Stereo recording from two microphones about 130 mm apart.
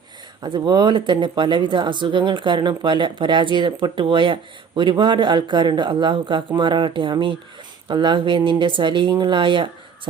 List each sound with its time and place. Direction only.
0.4 s speech: 35° right (ahead or behind)